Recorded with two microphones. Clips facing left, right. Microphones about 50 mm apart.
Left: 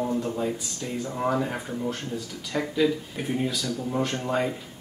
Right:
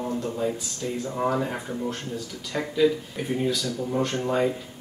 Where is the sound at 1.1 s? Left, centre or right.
Centre.